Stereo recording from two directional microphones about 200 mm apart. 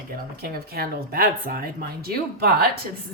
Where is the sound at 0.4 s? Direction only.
50° right (ahead or behind).